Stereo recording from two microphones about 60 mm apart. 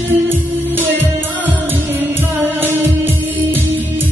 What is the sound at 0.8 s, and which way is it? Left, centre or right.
Music, right.